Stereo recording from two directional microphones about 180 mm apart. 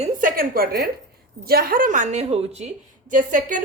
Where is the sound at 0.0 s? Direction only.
50° right (ahead or behind).